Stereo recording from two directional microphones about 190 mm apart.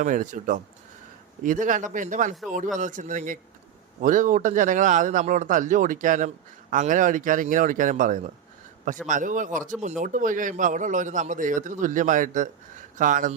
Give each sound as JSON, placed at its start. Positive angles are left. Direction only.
{"t": 0.0, "sound": "speech", "side_deg": -40}